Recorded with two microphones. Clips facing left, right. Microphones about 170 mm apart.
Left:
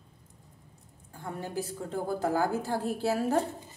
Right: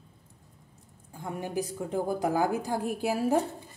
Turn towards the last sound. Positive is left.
turn(degrees=-15)  # may be behind; listen again after turning